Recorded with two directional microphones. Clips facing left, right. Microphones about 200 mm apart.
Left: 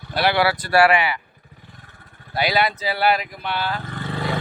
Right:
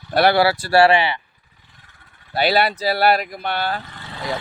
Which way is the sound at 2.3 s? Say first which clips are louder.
Right 3 dB; 30° right (ahead or behind).